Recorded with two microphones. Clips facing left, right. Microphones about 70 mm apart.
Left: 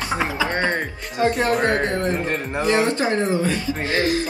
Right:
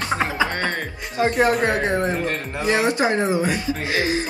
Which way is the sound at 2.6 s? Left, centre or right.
Centre.